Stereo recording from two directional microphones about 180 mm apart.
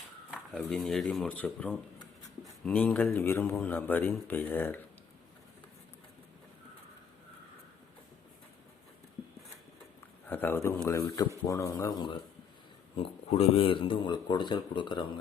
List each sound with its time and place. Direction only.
0.5 s a man's voice: 5° left (ahead or behind)
10.2 s a man's voice: 10° left (ahead or behind)
13.0 s speech: 35° left (ahead or behind)